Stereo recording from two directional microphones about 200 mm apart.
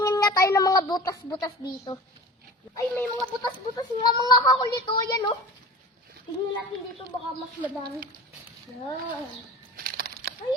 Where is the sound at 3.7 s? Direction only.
20° left (ahead or behind).